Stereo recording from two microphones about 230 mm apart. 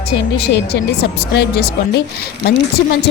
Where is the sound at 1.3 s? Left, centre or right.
Left.